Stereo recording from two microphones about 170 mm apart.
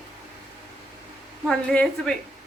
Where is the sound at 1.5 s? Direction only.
5° left (ahead or behind).